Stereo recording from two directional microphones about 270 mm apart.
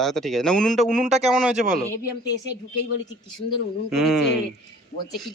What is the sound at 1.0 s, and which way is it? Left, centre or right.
Speech, right.